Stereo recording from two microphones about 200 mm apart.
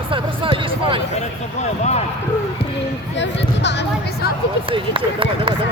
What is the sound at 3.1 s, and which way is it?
Speech, 60° left (ahead or behind).